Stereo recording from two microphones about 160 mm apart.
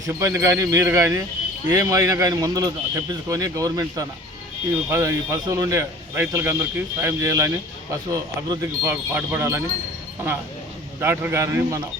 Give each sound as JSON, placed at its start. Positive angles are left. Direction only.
{"t": 0.1, "sound": "a man's voice", "side_deg": -20}
{"t": 11.0, "sound": "speech", "side_deg": -15}